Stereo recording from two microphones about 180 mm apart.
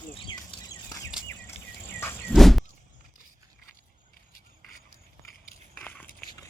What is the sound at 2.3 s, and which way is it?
Vehicle, centre (ahead or behind).